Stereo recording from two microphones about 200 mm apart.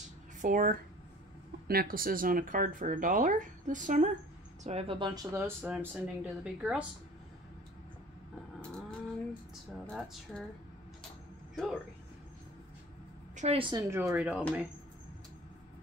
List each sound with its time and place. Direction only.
0.4 s speech: 40° right (ahead or behind)
4.6 s speech: 30° right (ahead or behind); by 6.9 s 5° right (ahead or behind)
9.7 s speech: centre (ahead or behind)
11.5 s speech: centre (ahead or behind)
13.4 s speech: 30° right (ahead or behind); by 14.4 s 5° right (ahead or behind)